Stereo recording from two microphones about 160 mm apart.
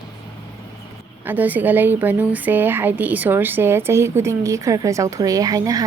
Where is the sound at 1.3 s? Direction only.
10° right (ahead or behind).